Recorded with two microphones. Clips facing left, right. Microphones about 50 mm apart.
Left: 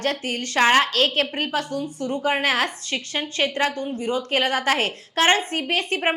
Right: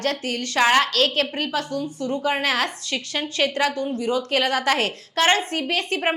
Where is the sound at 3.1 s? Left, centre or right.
Centre.